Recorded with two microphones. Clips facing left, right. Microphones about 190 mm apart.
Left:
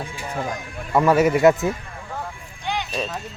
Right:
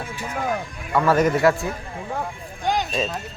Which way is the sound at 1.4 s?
20° left (ahead or behind).